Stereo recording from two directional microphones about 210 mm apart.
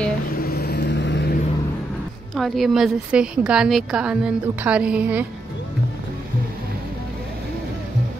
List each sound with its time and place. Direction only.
0.4 s vehicle: 50° left (ahead or behind)
2.3 s a woman's voice: centre (ahead or behind)